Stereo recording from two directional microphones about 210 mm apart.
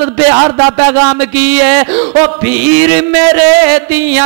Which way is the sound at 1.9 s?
25° right (ahead or behind).